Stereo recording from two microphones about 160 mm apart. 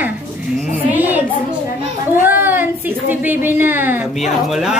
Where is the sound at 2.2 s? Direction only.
15° right (ahead or behind).